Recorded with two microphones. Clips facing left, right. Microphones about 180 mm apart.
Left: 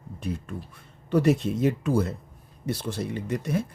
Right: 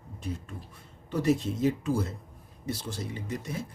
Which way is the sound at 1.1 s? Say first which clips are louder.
Left 5 dB; 65° left (ahead or behind).